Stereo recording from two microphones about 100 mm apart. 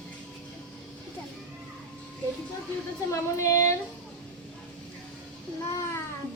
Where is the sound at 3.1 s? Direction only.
30° left (ahead or behind).